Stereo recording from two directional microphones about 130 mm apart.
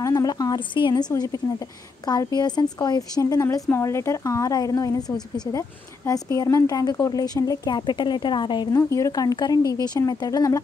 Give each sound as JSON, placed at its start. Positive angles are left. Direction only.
{"t": 0.0, "sound": "a woman's voice", "side_deg": 30}